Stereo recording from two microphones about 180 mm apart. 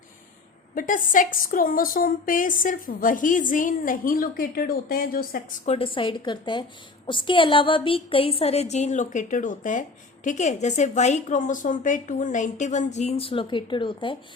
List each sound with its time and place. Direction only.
0.8 s a woman's voice: 45° left (ahead or behind)
5.6 s a woman's voice: 30° left (ahead or behind)